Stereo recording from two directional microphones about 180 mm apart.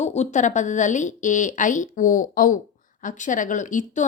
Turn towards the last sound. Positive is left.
turn(degrees=45)  # may be behind; listen again after turning